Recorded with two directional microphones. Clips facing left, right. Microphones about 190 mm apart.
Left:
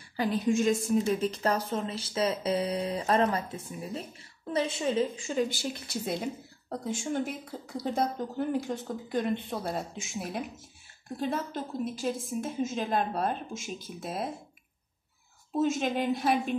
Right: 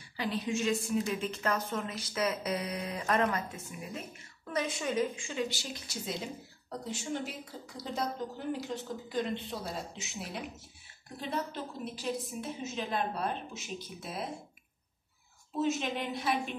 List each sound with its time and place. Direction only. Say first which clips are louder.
0.2 s a woman's voice: left 6 dB; 45° left (ahead or behind)
15.6 s a woman's voice: left 4 dB; 45° left (ahead or behind)